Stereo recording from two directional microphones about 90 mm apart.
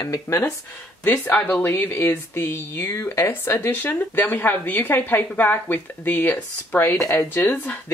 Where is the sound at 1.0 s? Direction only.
20° left (ahead or behind).